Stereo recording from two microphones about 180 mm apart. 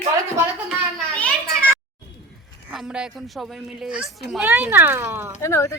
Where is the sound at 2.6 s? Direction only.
5° right (ahead or behind).